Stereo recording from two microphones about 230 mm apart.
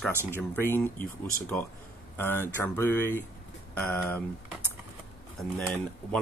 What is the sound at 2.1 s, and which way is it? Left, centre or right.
Speech, centre.